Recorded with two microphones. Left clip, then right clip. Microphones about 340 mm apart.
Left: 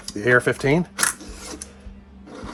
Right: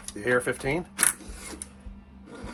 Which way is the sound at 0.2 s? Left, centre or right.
Left.